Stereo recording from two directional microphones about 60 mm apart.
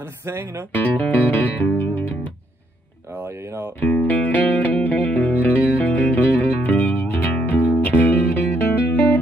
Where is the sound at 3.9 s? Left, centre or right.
Left.